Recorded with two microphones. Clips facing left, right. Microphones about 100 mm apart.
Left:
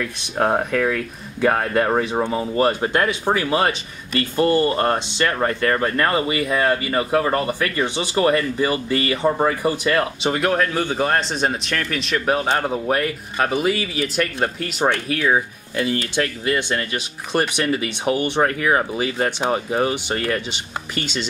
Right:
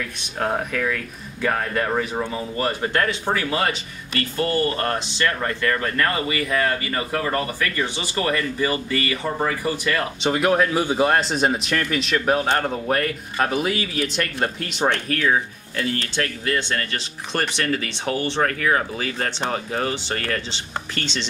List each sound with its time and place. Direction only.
0.4 s speech: 30° left (ahead or behind)
2.9 s speech: 15° left (ahead or behind)
10.2 s speech: centre (ahead or behind)